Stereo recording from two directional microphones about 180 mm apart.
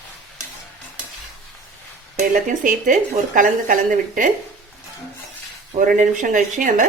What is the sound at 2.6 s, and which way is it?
Speech, 45° right (ahead or behind).